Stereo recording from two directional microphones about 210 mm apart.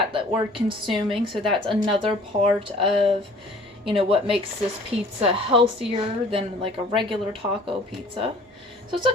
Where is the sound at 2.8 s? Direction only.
25° right (ahead or behind).